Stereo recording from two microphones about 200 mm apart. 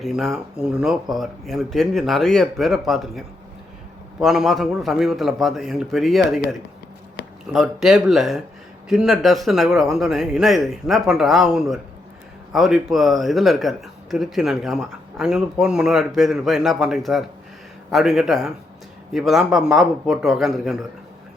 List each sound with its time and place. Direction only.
0.0 s speech: centre (ahead or behind)
7.2 s a sound: 60° left (ahead or behind)
7.5 s speech: centre (ahead or behind)